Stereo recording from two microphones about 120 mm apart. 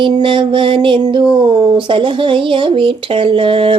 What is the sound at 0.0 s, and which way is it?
Speech, 45° right (ahead or behind).